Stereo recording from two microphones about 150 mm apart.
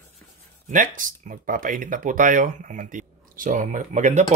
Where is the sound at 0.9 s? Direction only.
60° right (ahead or behind).